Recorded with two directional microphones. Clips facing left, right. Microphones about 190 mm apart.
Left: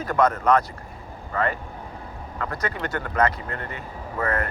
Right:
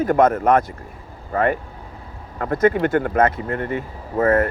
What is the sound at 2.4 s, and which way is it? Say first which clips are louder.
Speech: right 12 dB; 50° right (ahead or behind).